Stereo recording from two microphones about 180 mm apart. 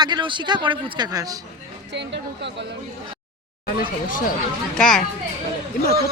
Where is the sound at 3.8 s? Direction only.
50° left (ahead or behind).